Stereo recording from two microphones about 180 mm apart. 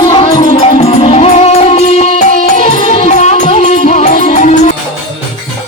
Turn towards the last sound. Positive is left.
turn(degrees=40)  # may be behind; listen again after turning